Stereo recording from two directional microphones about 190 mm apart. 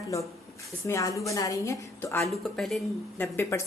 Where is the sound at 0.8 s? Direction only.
15° left (ahead or behind).